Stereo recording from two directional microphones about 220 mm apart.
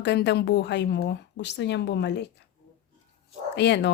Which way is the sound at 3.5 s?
50° left (ahead or behind).